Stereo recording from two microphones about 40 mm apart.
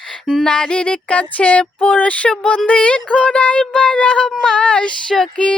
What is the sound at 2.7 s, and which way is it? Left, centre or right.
Music, left.